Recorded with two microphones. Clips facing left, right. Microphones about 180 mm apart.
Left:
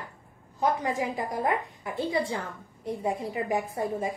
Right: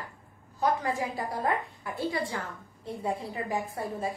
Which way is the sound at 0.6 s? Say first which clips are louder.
Left 1 dB; 20° left (ahead or behind).